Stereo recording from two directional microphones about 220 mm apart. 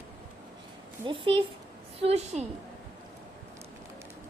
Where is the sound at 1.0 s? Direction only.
20° right (ahead or behind).